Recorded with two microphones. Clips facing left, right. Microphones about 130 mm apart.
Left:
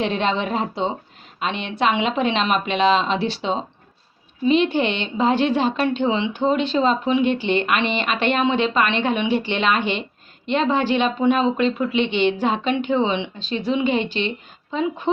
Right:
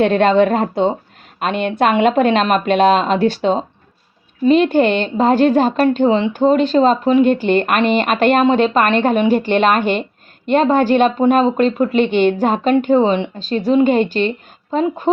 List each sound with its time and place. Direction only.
0.0 s a woman's voice: 50° right (ahead or behind)